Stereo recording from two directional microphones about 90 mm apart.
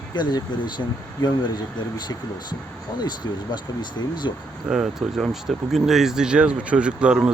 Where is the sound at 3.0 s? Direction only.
55° left (ahead or behind).